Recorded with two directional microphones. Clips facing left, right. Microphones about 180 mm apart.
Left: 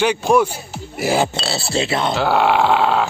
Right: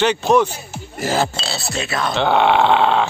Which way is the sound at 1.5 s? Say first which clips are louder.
Left 4 dB; 30° left (ahead or behind).